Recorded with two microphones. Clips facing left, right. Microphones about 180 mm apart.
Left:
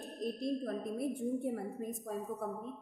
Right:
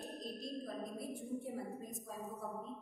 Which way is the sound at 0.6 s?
60° left (ahead or behind).